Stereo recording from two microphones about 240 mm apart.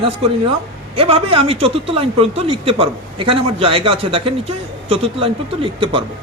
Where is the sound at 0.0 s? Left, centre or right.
Right.